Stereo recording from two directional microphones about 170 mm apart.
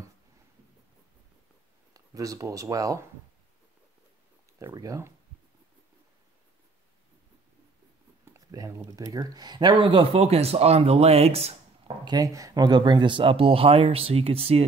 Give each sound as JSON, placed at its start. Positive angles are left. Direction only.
{"t": 2.0, "sound": "speech", "side_deg": -20}
{"t": 4.6, "sound": "speech", "side_deg": -20}
{"t": 8.3, "sound": "speech", "side_deg": -20}
{"t": 12.0, "sound": "speech", "side_deg": -20}